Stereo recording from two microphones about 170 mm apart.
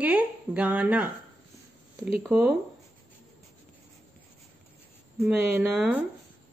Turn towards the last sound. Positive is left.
turn(degrees=-5)  # may be behind; listen again after turning